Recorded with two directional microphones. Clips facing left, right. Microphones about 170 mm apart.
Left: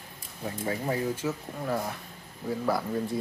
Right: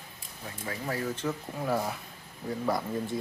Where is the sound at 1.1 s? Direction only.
Centre (ahead or behind).